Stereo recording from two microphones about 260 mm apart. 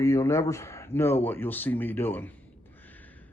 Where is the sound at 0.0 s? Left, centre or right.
Centre.